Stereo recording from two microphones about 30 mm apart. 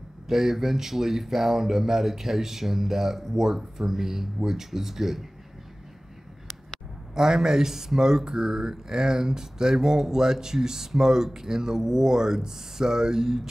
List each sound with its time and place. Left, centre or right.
0.3 s speech: centre
7.2 s speech: centre